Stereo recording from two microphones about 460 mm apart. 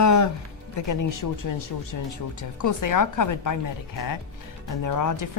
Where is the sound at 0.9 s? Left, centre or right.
Left.